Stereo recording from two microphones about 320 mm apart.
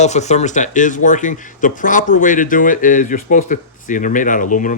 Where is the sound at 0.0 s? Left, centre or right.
Left.